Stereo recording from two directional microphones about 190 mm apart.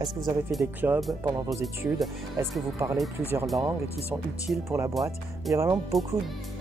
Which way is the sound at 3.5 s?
15° right (ahead or behind).